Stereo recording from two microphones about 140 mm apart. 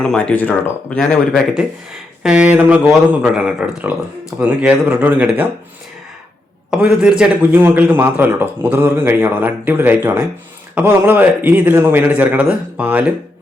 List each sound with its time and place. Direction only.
0.0 s a man's voice: 5° left (ahead or behind); by 5.5 s 10° right (ahead or behind)
6.7 s a man's voice: 5° right (ahead or behind)